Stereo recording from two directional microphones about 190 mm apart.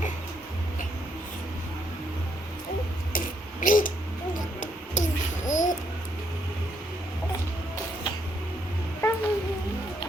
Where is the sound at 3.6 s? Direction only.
45° left (ahead or behind).